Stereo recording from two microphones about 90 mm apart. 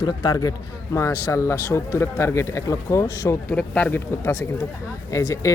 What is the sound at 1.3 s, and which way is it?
Speech, 35° left (ahead or behind).